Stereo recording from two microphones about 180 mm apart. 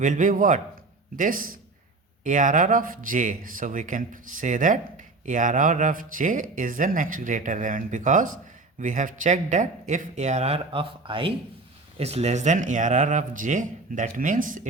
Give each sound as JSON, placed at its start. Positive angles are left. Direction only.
{"t": 0.0, "sound": "speech", "side_deg": -45}